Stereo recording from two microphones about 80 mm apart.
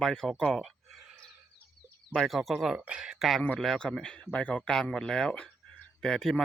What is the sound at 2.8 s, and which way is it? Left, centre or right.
Speech, centre.